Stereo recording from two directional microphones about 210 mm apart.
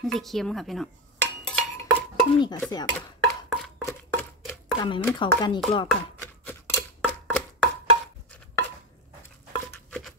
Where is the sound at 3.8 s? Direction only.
15° left (ahead or behind).